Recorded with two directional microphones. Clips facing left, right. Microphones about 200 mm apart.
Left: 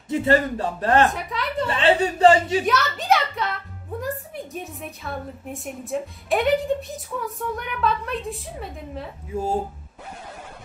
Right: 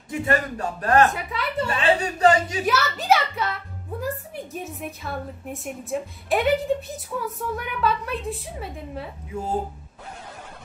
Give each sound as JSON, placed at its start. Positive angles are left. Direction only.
{"t": 0.1, "sound": "a man's voice", "side_deg": 25}
{"t": 1.1, "sound": "a woman's voice", "side_deg": 0}
{"t": 1.8, "sound": "a man's voice", "side_deg": 25}
{"t": 2.6, "sound": "a woman's voice", "side_deg": -5}
{"t": 4.6, "sound": "a woman's voice", "side_deg": 0}
{"t": 9.3, "sound": "speech", "side_deg": 30}